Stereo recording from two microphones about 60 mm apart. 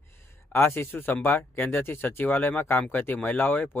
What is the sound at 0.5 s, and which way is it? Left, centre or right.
Speech, left.